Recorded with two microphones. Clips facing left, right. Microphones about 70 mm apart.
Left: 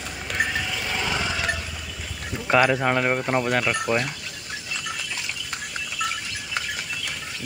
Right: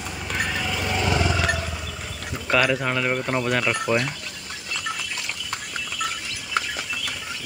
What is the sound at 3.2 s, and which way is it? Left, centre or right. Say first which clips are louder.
Speech: left 1 dB; centre.